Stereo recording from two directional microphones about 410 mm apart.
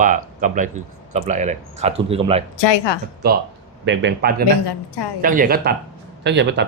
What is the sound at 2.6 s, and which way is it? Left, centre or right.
Speech, left.